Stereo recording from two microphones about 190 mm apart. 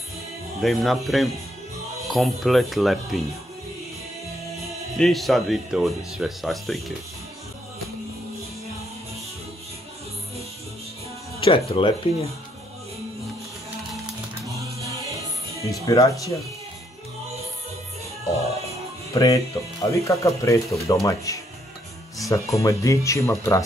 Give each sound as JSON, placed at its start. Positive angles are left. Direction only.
{"t": 0.6, "sound": "speech", "side_deg": 0}
{"t": 4.9, "sound": "speech", "side_deg": 0}
{"t": 11.3, "sound": "music", "side_deg": 30}
{"t": 11.7, "sound": "speech", "side_deg": 30}
{"t": 14.5, "sound": "music", "side_deg": -15}
{"t": 15.8, "sound": "speech", "side_deg": 15}
{"t": 19.1, "sound": "speech", "side_deg": 15}